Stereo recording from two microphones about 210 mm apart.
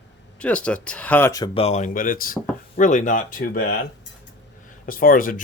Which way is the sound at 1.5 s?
30° left (ahead or behind).